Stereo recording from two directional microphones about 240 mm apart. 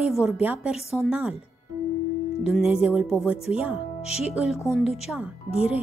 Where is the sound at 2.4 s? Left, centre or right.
Centre.